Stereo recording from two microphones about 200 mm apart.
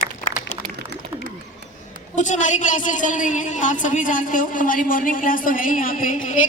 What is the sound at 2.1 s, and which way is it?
A woman's voice, 40° left (ahead or behind).